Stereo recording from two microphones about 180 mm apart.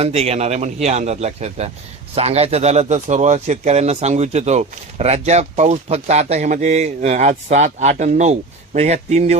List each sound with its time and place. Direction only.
0.0 s speech: 35° right (ahead or behind)